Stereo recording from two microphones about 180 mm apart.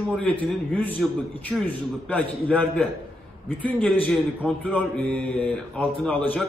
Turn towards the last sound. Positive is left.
turn(degrees=10)  # may be behind; listen again after turning